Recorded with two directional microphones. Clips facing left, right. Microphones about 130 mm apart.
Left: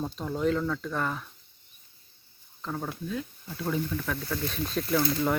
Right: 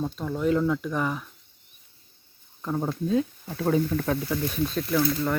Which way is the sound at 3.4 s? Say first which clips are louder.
Right 7 dB; 60° right (ahead or behind).